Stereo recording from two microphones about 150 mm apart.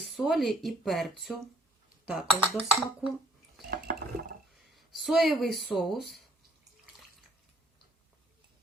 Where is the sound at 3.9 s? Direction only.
70° right (ahead or behind).